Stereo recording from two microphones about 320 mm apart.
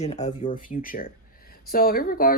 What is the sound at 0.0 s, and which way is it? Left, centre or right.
Speech, left.